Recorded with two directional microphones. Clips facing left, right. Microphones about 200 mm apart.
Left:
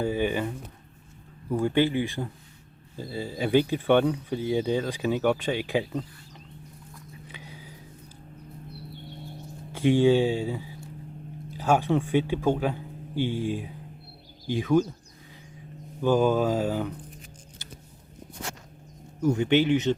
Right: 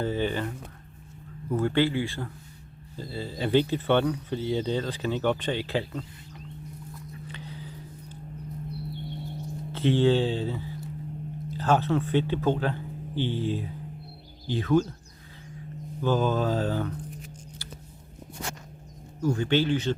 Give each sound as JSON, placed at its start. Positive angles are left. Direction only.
{"t": 0.0, "sound": "a sound", "side_deg": 10}
{"t": 1.5, "sound": "speech", "side_deg": 15}
{"t": 7.3, "sound": "a sound", "side_deg": 10}
{"t": 9.7, "sound": "speech", "side_deg": 10}
{"t": 16.0, "sound": "speech", "side_deg": 10}
{"t": 19.2, "sound": "speech", "side_deg": 20}